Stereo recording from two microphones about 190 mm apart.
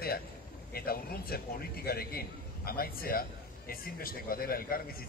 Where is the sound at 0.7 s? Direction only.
50° left (ahead or behind).